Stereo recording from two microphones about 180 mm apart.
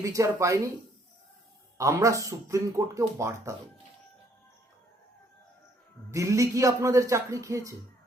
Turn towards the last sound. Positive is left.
turn(degrees=-15)  # may be behind; listen again after turning